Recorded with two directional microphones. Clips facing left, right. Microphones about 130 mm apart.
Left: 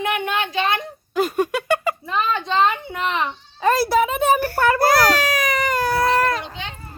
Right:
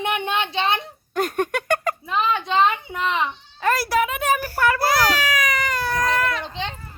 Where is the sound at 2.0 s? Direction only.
5° right (ahead or behind).